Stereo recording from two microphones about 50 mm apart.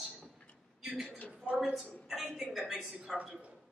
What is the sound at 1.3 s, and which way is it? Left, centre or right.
Speech, right.